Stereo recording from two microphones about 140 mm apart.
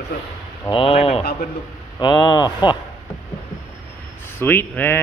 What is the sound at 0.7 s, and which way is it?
Speech, 40° left (ahead or behind).